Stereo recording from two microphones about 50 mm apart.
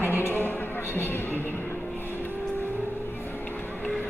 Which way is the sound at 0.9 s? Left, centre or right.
Left.